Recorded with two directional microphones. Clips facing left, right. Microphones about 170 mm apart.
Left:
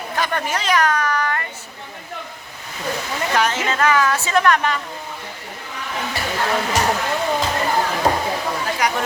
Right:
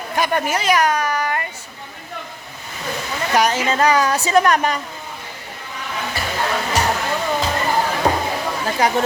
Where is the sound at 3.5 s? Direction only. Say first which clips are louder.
Right 2 dB; 35° right (ahead or behind).